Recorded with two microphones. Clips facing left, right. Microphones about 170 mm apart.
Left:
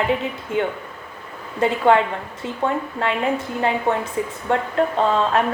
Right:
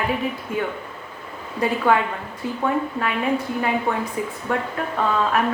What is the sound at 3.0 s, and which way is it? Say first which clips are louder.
A woman's voice: left 1 dB; 25° left (ahead or behind).